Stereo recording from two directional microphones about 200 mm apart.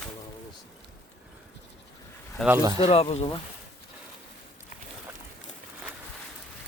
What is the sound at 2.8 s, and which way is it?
Speech, 30° left (ahead or behind).